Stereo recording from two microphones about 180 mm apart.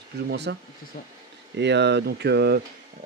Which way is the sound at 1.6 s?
70° right (ahead or behind).